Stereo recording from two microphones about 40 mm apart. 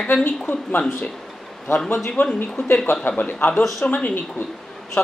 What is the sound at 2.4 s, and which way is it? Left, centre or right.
A man's voice, left.